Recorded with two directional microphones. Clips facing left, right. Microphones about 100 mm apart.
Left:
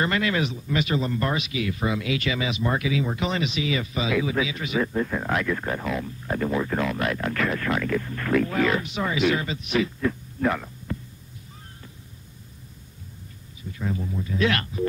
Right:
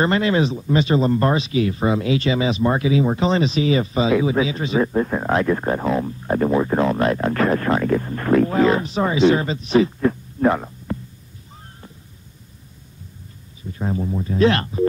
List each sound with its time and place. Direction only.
0.0 s speech: 30° right (ahead or behind)
13.7 s speech: 35° right (ahead or behind)